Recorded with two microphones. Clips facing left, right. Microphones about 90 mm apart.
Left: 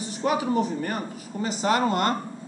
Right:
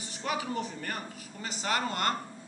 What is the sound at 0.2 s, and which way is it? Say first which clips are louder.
A man's voice: left 9 dB; 20° left (ahead or behind).